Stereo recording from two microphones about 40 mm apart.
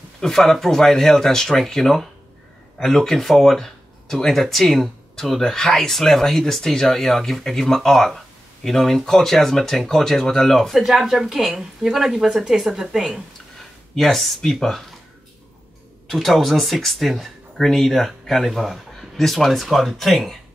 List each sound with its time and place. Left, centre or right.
0.2 s speech: centre
13.9 s speech: centre
16.1 s speech: centre
17.6 s speech: centre